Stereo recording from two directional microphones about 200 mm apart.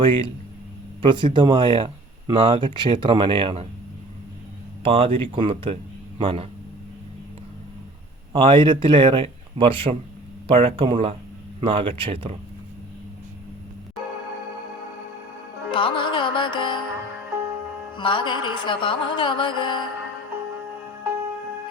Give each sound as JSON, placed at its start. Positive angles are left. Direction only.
{"t": 0.0, "sound": "speech", "side_deg": -25}
{"t": 4.8, "sound": "speech", "side_deg": -25}
{"t": 8.3, "sound": "speech", "side_deg": -25}
{"t": 15.7, "sound": "music", "side_deg": 25}
{"t": 17.9, "sound": "music", "side_deg": 25}